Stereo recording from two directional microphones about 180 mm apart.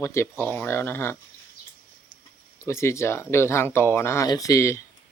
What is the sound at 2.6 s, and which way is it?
Speech, 15° left (ahead or behind).